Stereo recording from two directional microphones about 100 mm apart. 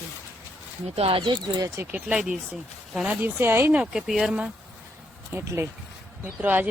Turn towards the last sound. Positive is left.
turn(degrees=-15)  # may be behind; listen again after turning